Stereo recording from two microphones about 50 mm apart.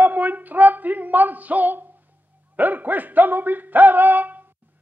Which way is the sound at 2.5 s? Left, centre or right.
Right.